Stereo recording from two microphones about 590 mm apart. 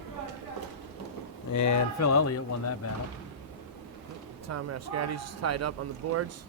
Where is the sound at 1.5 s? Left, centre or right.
Left.